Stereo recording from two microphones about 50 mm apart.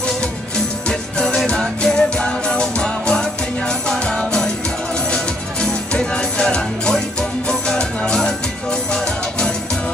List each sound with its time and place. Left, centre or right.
0.8 s music: centre